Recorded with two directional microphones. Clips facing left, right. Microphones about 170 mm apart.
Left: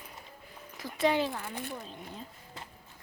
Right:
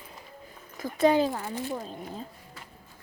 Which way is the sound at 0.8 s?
45° right (ahead or behind).